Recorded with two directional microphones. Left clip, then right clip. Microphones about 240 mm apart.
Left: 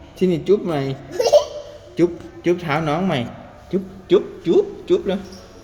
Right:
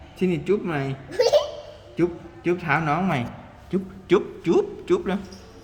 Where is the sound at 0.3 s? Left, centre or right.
Centre.